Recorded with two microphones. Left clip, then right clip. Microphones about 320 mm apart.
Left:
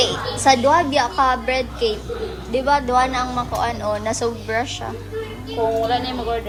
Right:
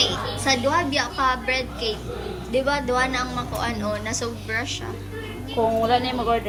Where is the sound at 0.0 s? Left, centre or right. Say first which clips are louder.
Left 5 dB; centre.